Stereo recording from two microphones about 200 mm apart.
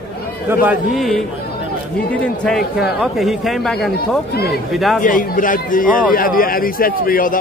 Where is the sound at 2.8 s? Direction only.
Centre (ahead or behind).